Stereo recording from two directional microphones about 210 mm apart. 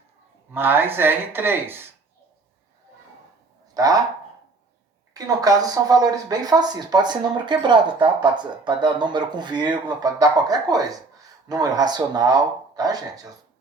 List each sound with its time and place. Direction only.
0.5 s speech: 10° right (ahead or behind)
3.8 s speech: 15° right (ahead or behind)
5.1 s speech: 15° right (ahead or behind)